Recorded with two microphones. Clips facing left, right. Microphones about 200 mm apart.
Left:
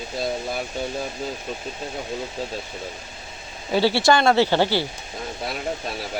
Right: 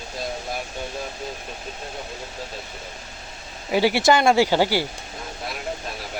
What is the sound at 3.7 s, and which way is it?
Speech, 15° right (ahead or behind).